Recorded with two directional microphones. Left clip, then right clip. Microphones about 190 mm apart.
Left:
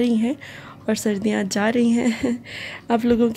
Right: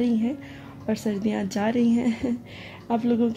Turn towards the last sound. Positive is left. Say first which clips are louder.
# left 5 dB
turn(degrees=35)  # may be behind; listen again after turning